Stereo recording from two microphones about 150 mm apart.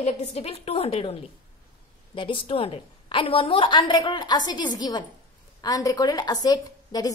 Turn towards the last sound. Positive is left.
turn(degrees=25)  # may be behind; listen again after turning